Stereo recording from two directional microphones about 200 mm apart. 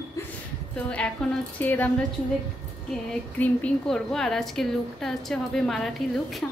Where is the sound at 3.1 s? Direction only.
5° left (ahead or behind).